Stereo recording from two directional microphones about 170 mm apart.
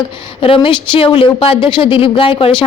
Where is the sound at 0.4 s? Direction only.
30° left (ahead or behind).